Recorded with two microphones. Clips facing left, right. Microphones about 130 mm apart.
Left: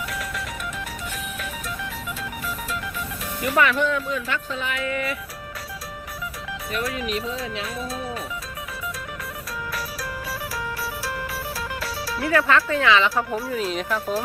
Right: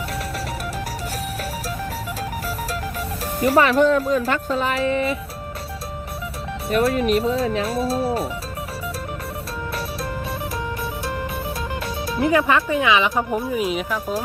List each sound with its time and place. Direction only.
3.4 s speech: 35° right (ahead or behind)
6.9 s speech: 50° right (ahead or behind)
7.3 s speech: 35° right (ahead or behind)
12.0 s speech: 20° right (ahead or behind)